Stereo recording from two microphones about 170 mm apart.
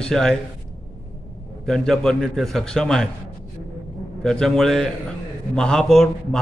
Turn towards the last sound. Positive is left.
turn(degrees=5)  # may be behind; listen again after turning